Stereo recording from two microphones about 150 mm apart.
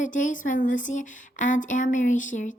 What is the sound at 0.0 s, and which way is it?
A woman's voice, 60° left (ahead or behind).